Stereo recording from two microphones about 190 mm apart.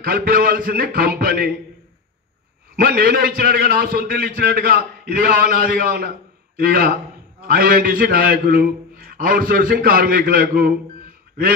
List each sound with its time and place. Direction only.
0.0 s a man's voice: 50° right (ahead or behind)
2.7 s a man's voice: 50° right (ahead or behind)